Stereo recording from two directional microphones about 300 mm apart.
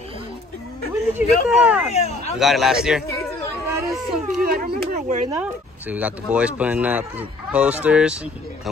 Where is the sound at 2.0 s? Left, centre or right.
Left.